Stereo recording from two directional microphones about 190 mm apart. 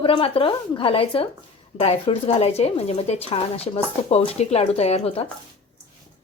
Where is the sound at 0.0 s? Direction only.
30° left (ahead or behind).